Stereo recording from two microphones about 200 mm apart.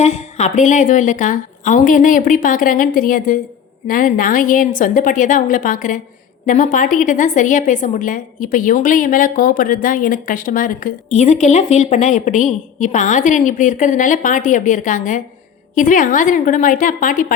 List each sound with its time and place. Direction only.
0.0 s a woman's voice: 35° left (ahead or behind)